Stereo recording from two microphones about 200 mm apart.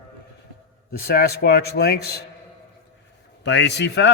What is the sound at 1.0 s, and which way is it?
Speech, 50° left (ahead or behind).